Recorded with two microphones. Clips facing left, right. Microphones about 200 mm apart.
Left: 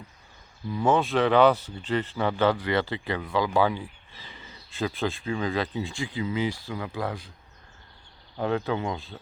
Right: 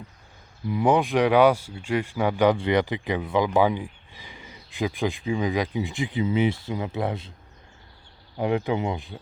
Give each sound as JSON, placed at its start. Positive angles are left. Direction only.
{"t": 0.7, "sound": "speech", "side_deg": -15}
{"t": 8.4, "sound": "speech", "side_deg": -15}